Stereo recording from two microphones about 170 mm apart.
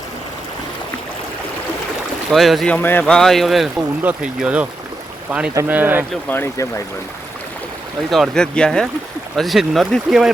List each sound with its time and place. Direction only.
2.3 s speech: centre (ahead or behind)
6.2 s speech: 15° left (ahead or behind)
8.1 s speech: centre (ahead or behind)